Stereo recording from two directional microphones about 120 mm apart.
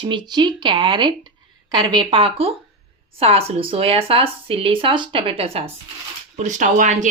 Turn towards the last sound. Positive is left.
turn(degrees=-90)